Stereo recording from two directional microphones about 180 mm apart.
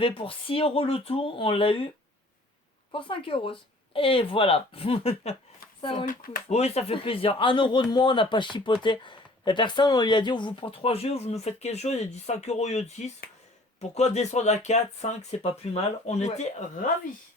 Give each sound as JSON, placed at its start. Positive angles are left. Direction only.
{"t": 0.0, "sound": "speech", "side_deg": 30}
{"t": 2.9, "sound": "speech", "side_deg": 30}
{"t": 6.1, "sound": "speech", "side_deg": 50}
{"t": 6.5, "sound": "speech", "side_deg": 35}